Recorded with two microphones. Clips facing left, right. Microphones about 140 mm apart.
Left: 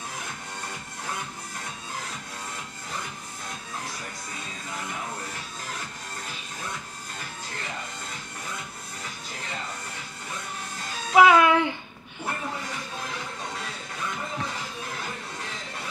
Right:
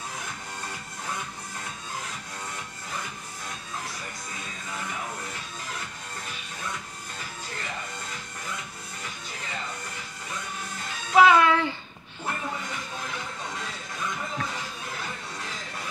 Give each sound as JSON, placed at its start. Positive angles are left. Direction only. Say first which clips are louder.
{"t": 11.1, "sound": "music", "louder": "left 1 dB", "side_deg": 5}